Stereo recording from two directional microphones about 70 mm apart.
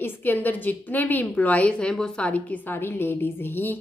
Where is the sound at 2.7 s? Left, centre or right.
Left.